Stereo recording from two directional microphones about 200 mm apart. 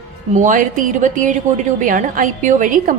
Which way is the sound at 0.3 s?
40° right (ahead or behind).